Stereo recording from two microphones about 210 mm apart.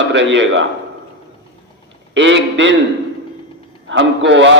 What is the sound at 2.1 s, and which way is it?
Speech, 60° right (ahead or behind).